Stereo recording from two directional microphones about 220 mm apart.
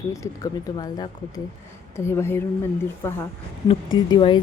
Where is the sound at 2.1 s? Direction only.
10° left (ahead or behind).